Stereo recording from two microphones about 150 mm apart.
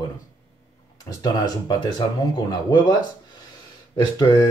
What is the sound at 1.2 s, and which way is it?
Speech, 30° left (ahead or behind).